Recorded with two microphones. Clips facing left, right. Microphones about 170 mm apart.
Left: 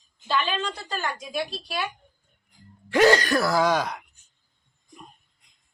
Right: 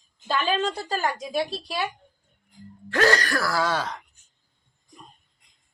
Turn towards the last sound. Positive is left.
turn(degrees=10)  # may be behind; listen again after turning